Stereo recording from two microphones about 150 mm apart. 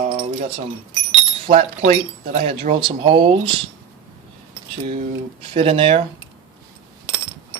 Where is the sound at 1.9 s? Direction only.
50° right (ahead or behind).